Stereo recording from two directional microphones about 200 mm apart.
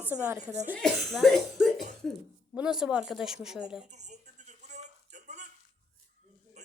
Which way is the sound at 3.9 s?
35° right (ahead or behind).